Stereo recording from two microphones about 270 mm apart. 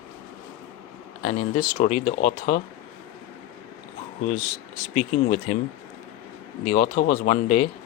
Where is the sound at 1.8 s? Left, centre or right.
Left.